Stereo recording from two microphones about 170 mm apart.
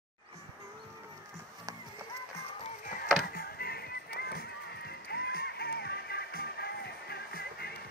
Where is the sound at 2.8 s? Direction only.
55° left (ahead or behind).